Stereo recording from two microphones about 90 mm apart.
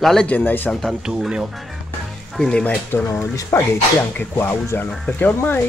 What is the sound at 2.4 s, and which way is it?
Speech, 10° left (ahead or behind).